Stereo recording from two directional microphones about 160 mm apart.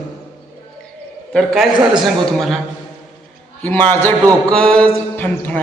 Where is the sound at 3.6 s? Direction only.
15° left (ahead or behind).